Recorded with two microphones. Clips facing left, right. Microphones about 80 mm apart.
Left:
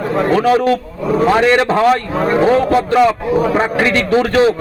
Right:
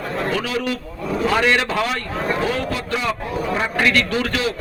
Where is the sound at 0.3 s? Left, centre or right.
Left.